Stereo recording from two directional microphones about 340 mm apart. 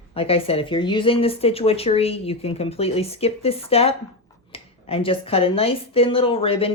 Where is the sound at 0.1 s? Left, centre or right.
Centre.